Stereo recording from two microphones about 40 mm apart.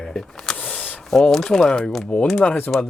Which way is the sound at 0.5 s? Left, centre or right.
Left.